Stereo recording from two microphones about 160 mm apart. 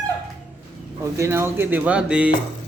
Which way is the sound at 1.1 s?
15° right (ahead or behind).